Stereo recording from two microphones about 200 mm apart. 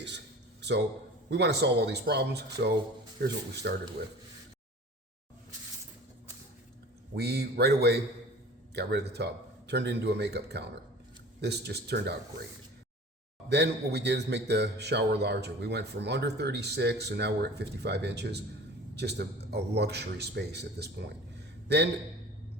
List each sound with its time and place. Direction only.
1.3 s a man's voice: 55° right (ahead or behind)
7.2 s a man's voice: 55° right (ahead or behind)
13.5 s a man's voice: 55° right (ahead or behind)